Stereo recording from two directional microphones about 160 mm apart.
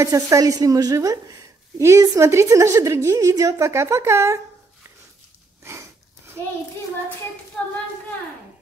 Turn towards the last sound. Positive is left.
turn(degrees=5)  # may be behind; listen again after turning